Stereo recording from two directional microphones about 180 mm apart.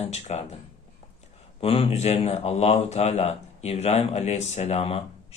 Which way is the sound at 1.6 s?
30° left (ahead or behind).